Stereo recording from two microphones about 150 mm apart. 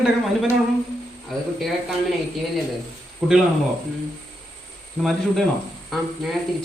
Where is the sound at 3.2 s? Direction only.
Centre (ahead or behind).